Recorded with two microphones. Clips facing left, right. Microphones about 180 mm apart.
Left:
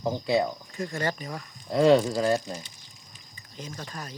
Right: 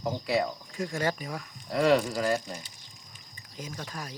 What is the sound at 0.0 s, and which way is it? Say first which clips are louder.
Speech: left 3 dB; 25° left (ahead or behind).